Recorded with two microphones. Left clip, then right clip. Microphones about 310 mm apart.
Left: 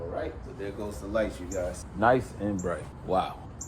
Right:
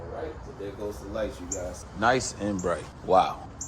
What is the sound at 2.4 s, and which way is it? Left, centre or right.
Speech, centre.